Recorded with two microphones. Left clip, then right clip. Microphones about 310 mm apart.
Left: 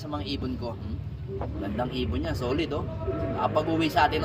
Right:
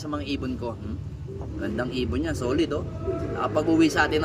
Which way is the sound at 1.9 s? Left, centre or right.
Centre.